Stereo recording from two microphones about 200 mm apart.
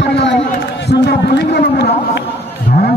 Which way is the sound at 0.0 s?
60° left (ahead or behind).